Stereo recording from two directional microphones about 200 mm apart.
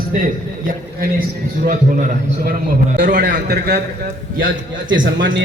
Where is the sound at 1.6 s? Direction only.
45° right (ahead or behind).